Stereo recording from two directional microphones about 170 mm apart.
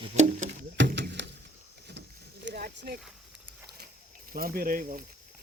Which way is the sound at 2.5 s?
65° right (ahead or behind).